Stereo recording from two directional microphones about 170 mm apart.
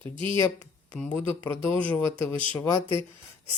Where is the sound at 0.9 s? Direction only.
5° left (ahead or behind).